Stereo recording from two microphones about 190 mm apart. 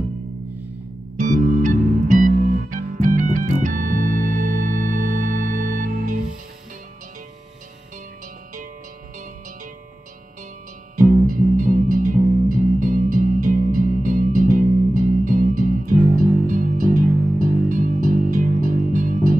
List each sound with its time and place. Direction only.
1.1 s music: 40° right (ahead or behind)
11.2 s music: 45° right (ahead or behind)